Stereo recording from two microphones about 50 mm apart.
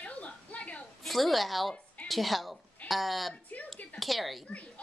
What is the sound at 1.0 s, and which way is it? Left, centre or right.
A woman's voice, centre.